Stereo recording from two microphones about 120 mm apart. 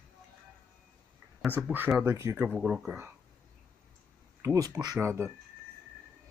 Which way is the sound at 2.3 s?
10° right (ahead or behind).